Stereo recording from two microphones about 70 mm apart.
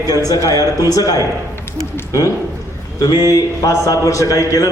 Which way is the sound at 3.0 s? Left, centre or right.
Left.